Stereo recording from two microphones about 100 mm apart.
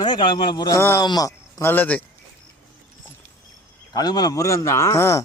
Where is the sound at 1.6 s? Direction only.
20° left (ahead or behind).